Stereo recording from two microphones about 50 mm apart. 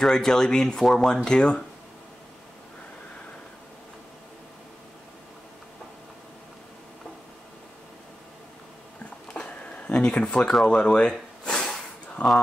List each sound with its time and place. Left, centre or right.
0.0 s speech: centre
9.5 s a sound: left
10.6 s speech: centre
11.5 s snort: centre
12.2 s speech: left